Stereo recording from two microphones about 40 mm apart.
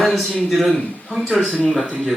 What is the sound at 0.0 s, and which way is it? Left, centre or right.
A man's voice, centre.